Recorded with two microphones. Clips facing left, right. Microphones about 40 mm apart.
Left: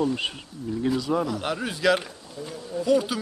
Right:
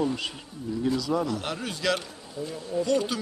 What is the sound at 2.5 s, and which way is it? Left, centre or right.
Speech, centre.